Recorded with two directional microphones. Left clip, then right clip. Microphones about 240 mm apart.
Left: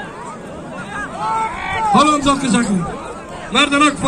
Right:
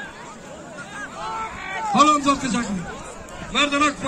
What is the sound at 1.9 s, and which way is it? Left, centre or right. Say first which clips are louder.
A man's voice: left 3 dB; left.